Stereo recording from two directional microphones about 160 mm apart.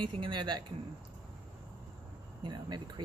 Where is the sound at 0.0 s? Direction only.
30° right (ahead or behind).